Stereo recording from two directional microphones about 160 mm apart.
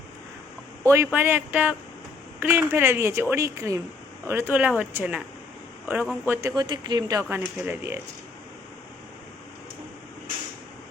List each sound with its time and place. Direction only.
0.9 s speech: 15° right (ahead or behind)
6.6 s speech: 25° right (ahead or behind)